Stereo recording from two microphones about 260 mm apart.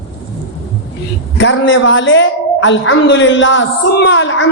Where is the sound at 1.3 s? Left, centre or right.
Left.